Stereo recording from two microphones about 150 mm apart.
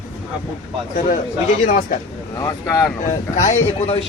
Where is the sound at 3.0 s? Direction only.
55° left (ahead or behind).